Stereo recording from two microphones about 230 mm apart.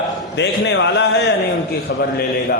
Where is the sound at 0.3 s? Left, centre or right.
Left.